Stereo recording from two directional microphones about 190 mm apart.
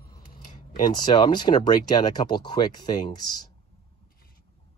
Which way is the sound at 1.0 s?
25° left (ahead or behind).